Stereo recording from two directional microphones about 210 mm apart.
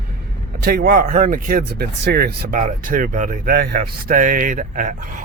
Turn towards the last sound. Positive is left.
turn(degrees=-40)  # may be behind; listen again after turning